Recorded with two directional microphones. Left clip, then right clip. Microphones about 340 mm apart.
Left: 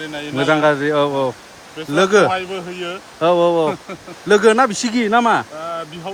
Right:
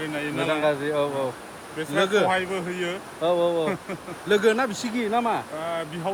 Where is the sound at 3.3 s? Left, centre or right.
Left.